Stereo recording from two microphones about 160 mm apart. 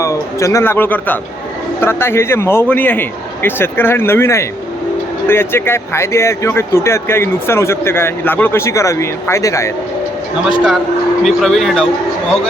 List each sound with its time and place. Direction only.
0.0 s speech: 20° left (ahead or behind)
11.2 s speech: centre (ahead or behind)